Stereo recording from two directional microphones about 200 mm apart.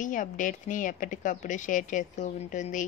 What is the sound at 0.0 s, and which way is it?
A woman's voice, 40° left (ahead or behind).